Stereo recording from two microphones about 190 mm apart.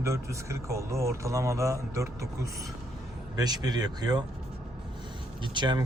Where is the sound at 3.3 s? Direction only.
20° right (ahead or behind).